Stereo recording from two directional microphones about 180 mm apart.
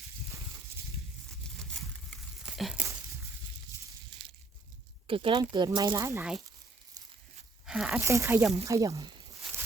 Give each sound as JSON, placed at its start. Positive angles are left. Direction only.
{"t": 1.7, "sound": "a sound", "side_deg": 0}
{"t": 5.0, "sound": "speech", "side_deg": -30}
{"t": 7.7, "sound": "speech", "side_deg": -5}